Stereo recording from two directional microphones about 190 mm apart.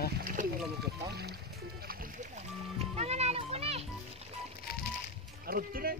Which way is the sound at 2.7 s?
35° right (ahead or behind).